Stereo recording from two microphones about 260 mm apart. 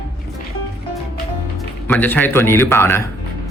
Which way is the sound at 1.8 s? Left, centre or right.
Centre.